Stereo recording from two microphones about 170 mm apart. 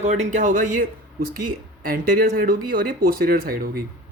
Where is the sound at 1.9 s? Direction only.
55° right (ahead or behind).